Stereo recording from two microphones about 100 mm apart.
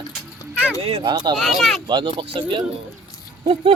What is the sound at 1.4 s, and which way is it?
Speech, centre (ahead or behind).